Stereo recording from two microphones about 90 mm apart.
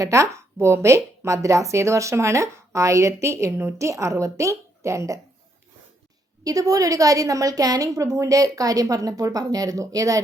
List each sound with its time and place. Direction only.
0.0 s a woman's voice: 35° right (ahead or behind)
6.4 s a woman's voice: 40° right (ahead or behind)